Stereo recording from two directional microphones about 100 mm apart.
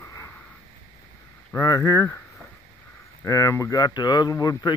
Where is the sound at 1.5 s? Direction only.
30° left (ahead or behind).